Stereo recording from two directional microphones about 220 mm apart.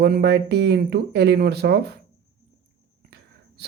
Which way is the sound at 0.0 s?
50° right (ahead or behind).